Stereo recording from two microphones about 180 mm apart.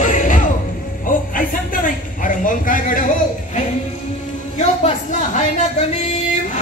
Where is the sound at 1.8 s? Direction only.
45° left (ahead or behind).